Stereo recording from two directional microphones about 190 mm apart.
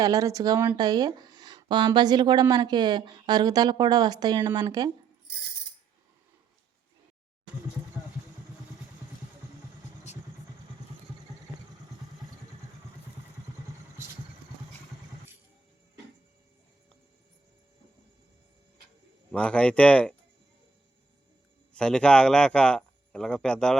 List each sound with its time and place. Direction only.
0.0 s speech: 20° right (ahead or behind)
19.3 s speech: 5° left (ahead or behind)
21.7 s speech: 5° left (ahead or behind)